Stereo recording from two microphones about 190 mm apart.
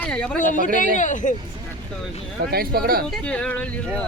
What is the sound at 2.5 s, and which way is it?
Speech, 55° right (ahead or behind).